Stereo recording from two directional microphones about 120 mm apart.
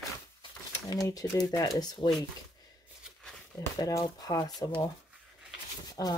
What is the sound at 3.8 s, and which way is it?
Speech, 30° left (ahead or behind).